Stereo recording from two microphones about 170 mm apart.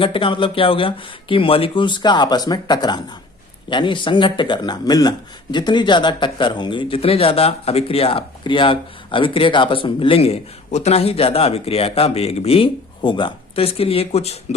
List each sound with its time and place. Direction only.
0.0 s speech: 30° left (ahead or behind)